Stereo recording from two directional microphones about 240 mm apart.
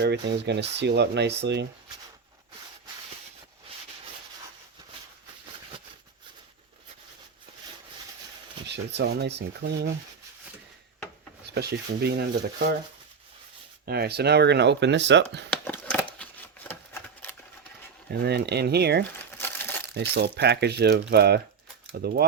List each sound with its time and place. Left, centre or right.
0.0 s speech: right
9.0 s speech: right
11.4 s speech: right
13.8 s speech: right
15.6 s a sound: centre
16.1 s shuffling cards: centre
18.1 s speech: right
19.2 s crumpling: centre
19.9 s speech: right